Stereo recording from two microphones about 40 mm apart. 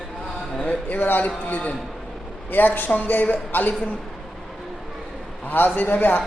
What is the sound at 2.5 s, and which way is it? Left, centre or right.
A man's voice, left.